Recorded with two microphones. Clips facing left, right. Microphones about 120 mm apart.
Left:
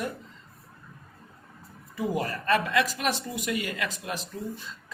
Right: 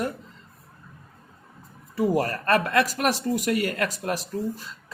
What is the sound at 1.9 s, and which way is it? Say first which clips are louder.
Speech: right 6 dB; 40° right (ahead or behind).